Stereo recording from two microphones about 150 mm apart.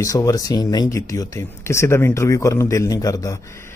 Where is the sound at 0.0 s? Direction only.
25° left (ahead or behind).